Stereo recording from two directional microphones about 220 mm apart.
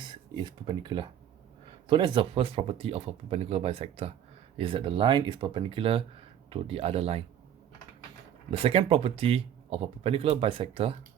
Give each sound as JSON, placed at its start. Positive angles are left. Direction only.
{"t": 0.0, "sound": "speech", "side_deg": -20}
{"t": 8.4, "sound": "speech", "side_deg": -25}